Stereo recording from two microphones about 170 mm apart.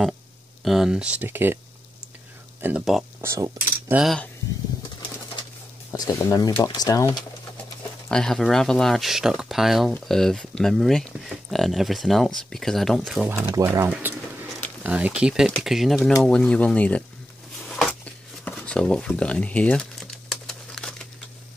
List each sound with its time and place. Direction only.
0.7 s speech: 5° right (ahead or behind)
2.6 s speech: 5° right (ahead or behind)
3.2 s speech: 20° right (ahead or behind)
3.9 s speech: centre (ahead or behind)
5.9 s speech: 20° left (ahead or behind)
8.1 s speech: 5° left (ahead or behind)
17.6 s a sound: 5° left (ahead or behind)